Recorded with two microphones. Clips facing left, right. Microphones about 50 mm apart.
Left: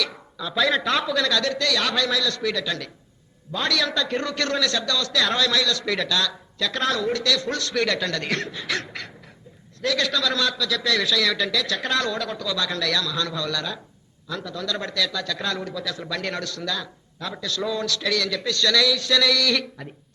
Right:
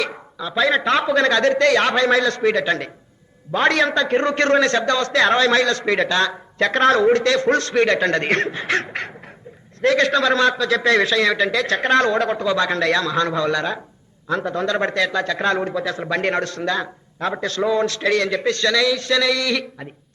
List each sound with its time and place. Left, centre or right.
0.0 s a man's voice: right